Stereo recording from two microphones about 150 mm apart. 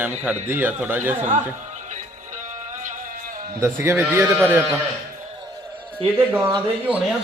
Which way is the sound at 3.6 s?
15° right (ahead or behind).